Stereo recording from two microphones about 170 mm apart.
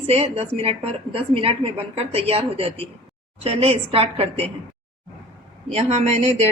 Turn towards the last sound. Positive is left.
turn(degrees=-40)  # may be behind; listen again after turning